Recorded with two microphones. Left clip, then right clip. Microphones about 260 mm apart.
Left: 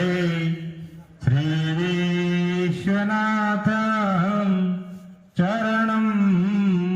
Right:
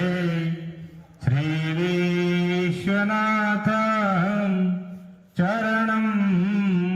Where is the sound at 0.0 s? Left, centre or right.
Left.